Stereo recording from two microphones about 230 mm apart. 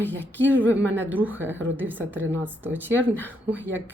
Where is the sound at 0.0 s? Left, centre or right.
Centre.